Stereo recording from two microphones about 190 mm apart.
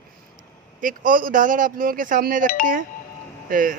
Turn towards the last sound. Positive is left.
turn(degrees=-45)  # may be behind; listen again after turning